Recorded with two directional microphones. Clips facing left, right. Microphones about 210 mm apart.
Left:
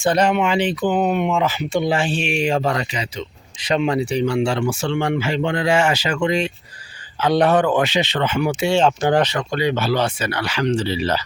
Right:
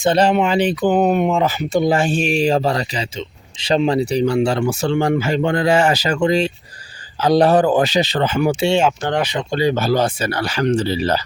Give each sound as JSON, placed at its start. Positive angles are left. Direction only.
{"t": 0.0, "sound": "speech", "side_deg": -30}
{"t": 9.0, "sound": "speech", "side_deg": 10}
{"t": 9.5, "sound": "speech", "side_deg": -35}